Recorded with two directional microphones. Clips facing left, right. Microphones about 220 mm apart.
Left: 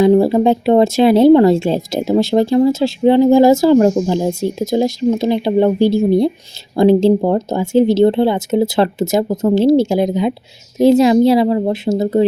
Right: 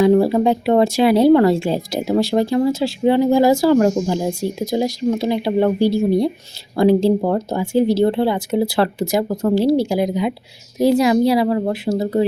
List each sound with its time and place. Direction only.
0.0 s speech: 25° left (ahead or behind)